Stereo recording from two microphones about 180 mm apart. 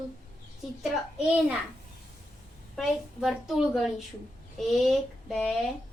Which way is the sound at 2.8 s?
Centre (ahead or behind).